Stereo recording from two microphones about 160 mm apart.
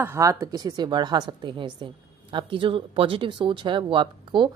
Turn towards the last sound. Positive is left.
turn(degrees=-30)  # may be behind; listen again after turning